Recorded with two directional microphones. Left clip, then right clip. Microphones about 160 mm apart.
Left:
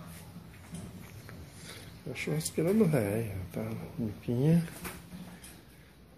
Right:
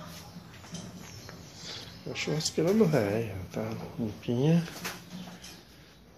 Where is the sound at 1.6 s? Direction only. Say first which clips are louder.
Right 5 dB; 5° left (ahead or behind).